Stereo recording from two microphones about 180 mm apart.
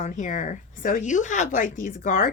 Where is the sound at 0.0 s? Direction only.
45° left (ahead or behind).